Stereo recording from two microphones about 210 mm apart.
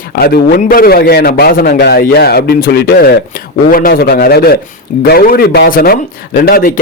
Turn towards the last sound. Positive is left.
turn(degrees=45)  # may be behind; listen again after turning